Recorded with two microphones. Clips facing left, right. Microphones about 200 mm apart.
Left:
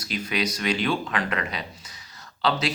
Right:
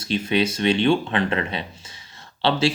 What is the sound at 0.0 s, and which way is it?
Speech, 25° right (ahead or behind).